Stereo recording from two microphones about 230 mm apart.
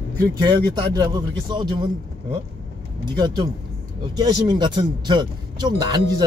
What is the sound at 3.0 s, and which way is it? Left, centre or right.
Speech, centre.